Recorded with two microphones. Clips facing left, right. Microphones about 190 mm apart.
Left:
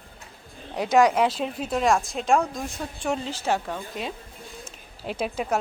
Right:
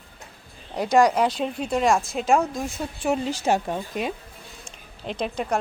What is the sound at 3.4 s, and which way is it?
Speech, 20° right (ahead or behind).